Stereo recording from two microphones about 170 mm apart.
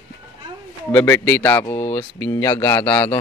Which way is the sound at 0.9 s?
10° left (ahead or behind).